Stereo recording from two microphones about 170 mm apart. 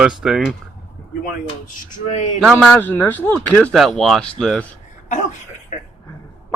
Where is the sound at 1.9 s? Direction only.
45° left (ahead or behind).